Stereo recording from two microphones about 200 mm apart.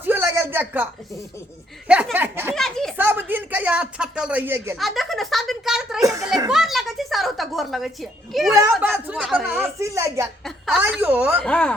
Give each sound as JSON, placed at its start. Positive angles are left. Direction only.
{"t": 0.0, "sound": "a sound", "side_deg": -10}
{"t": 1.9, "sound": "speech", "side_deg": -5}
{"t": 2.6, "sound": "a sound", "side_deg": 0}
{"t": 3.0, "sound": "speech", "side_deg": -10}
{"t": 4.8, "sound": "a child's voice", "side_deg": 0}
{"t": 6.0, "sound": "children playing", "side_deg": -15}
{"t": 6.5, "sound": "a sound", "side_deg": 0}
{"t": 8.3, "sound": "speech", "side_deg": 0}
{"t": 10.4, "sound": "a woman's voice", "side_deg": -5}
{"t": 11.4, "sound": "speech", "side_deg": 5}